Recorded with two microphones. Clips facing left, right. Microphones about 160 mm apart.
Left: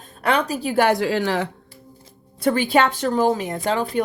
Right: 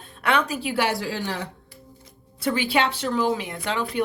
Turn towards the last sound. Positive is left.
turn(degrees=40)  # may be behind; listen again after turning